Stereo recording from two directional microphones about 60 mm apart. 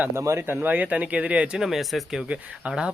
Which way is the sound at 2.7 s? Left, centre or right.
Centre.